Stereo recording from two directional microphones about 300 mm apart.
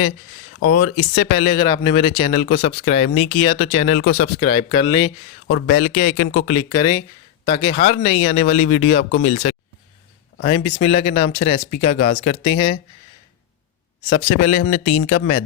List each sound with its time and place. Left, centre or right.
0.6 s speech: left
3.8 s speech: left
4.4 s speech: centre
5.5 s speech: left
6.5 s speech: centre
9.0 s speech: left
10.3 s speech: left
14.2 s speech: left